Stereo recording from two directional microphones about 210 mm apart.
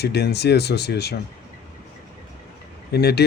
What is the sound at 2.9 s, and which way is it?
Speech, 50° left (ahead or behind).